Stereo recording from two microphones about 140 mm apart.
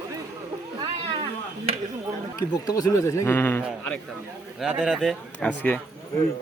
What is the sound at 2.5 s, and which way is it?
A man's voice, 30° left (ahead or behind).